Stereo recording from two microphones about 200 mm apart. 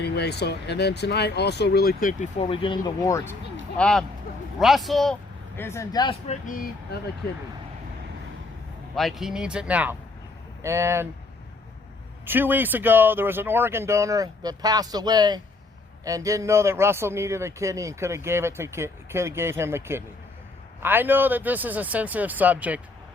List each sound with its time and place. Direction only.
0.0 s speech: 55° left (ahead or behind)
2.4 s speech: 25° left (ahead or behind)
3.8 s speech: 5° left (ahead or behind)
5.5 s speech: 15° left (ahead or behind)
6.2 s speech: 40° left (ahead or behind)
9.0 s a man's voice: centre (ahead or behind)
12.2 s a man's voice: 10° right (ahead or behind)